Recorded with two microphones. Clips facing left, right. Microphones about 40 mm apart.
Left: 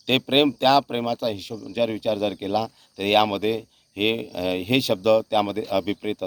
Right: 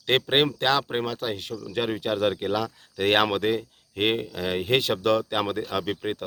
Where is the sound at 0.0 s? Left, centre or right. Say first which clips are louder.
Left 2 dB; centre.